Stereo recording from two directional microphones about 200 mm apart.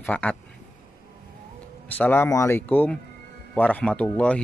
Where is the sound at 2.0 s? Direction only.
10° left (ahead or behind).